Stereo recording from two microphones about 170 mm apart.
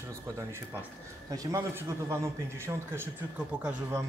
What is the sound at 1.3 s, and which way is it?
A man's voice, 20° right (ahead or behind).